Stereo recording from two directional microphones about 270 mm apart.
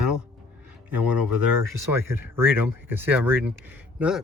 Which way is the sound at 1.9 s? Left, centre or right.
Centre.